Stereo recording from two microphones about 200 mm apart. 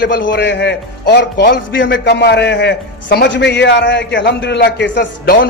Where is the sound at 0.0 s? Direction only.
60° left (ahead or behind).